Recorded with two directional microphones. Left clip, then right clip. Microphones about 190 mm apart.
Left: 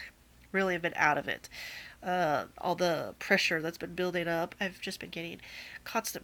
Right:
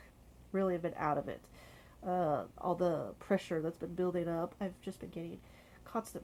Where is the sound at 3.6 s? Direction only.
25° left (ahead or behind).